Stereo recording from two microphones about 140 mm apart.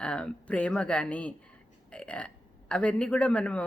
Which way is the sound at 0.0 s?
10° left (ahead or behind).